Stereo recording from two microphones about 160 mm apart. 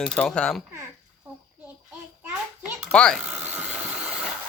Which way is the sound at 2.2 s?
10° right (ahead or behind).